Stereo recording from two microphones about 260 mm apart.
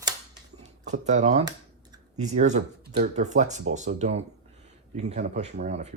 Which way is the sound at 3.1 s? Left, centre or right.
Right.